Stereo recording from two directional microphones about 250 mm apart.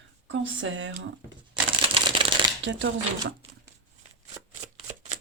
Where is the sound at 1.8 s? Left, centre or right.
Right.